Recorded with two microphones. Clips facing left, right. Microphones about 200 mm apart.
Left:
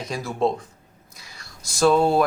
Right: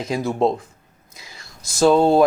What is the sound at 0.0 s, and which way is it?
Speech, 25° right (ahead or behind).